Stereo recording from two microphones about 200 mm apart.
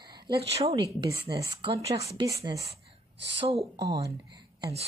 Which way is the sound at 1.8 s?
30° right (ahead or behind).